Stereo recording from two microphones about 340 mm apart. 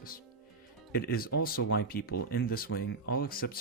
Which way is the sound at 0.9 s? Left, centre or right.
Left.